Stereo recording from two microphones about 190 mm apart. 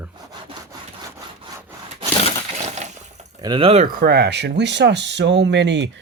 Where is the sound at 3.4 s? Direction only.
25° right (ahead or behind).